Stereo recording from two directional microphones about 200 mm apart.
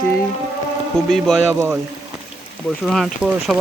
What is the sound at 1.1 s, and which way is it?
Speech, centre (ahead or behind).